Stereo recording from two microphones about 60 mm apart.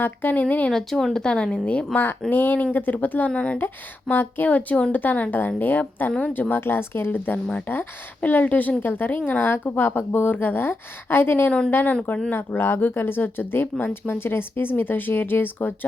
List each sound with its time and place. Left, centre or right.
0.0 s speech: left
0.7 s a woman's voice: centre
2.3 s a woman's voice: left
4.1 s a woman's voice: left